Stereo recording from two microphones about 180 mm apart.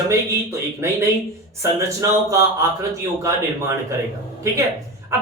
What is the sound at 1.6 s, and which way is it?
Speech, 15° right (ahead or behind).